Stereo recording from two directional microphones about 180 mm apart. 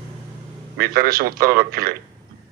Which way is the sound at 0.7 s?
55° right (ahead or behind).